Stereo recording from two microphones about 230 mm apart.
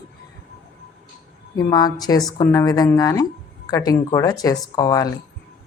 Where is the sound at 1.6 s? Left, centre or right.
Centre.